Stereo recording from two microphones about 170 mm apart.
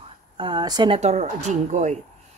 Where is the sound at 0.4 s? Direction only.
25° right (ahead or behind).